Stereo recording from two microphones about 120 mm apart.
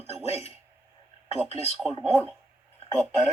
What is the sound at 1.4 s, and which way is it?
Speech, 60° left (ahead or behind).